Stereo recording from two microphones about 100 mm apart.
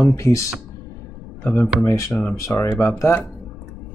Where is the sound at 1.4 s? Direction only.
20° left (ahead or behind).